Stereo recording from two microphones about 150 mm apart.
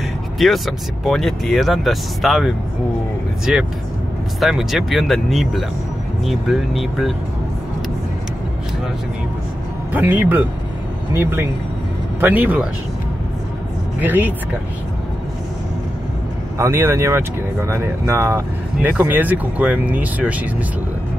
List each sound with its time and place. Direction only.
0.4 s speech: centre (ahead or behind)
9.9 s speech: 10° right (ahead or behind)
13.9 s speech: 10° right (ahead or behind)
16.5 s speech: 20° right (ahead or behind)